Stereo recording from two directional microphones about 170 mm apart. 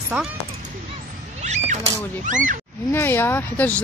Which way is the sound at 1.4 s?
45° right (ahead or behind).